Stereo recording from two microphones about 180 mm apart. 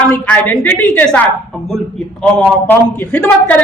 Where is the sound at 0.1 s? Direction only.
10° left (ahead or behind).